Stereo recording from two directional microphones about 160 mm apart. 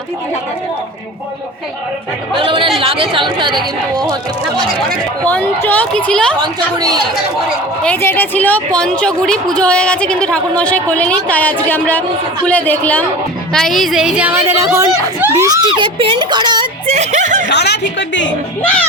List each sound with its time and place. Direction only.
2.4 s a man's voice: 35° right (ahead or behind)
5.3 s a woman's voice: 10° left (ahead or behind)
6.4 s speech: 25° right (ahead or behind)
7.9 s a woman's voice: 10° left (ahead or behind); by 16.9 s 25° right (ahead or behind)
16.9 s speech: 45° right (ahead or behind)
17.5 s a woman's voice: 90° left